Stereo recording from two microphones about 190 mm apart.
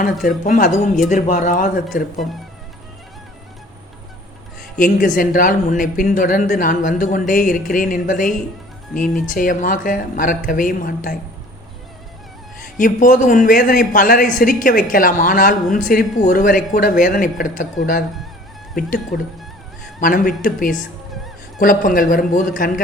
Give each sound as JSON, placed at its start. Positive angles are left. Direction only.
{"t": 0.3, "sound": "a man's voice", "side_deg": 40}
{"t": 4.8, "sound": "a man's voice", "side_deg": 45}
{"t": 12.8, "sound": "a man's voice", "side_deg": 45}